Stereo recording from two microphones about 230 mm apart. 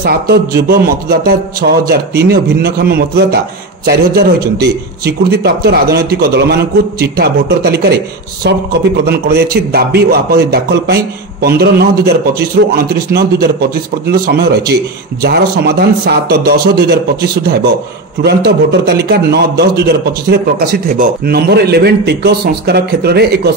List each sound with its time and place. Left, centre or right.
0.0 s a man's voice: right